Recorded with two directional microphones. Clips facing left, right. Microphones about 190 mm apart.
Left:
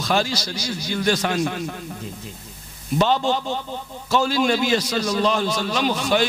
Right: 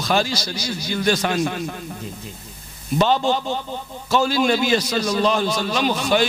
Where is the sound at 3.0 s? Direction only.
15° right (ahead or behind).